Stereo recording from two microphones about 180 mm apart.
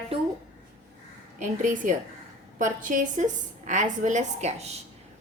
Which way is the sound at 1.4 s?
45° right (ahead or behind).